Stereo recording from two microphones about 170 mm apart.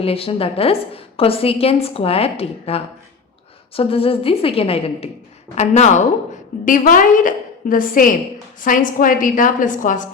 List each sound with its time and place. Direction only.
0.0 s a woman's voice: 35° left (ahead or behind)